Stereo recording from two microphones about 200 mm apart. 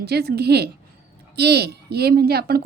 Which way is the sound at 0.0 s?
55° right (ahead or behind).